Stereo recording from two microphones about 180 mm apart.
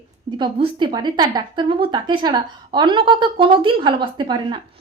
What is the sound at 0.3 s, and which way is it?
A woman's voice, 25° right (ahead or behind).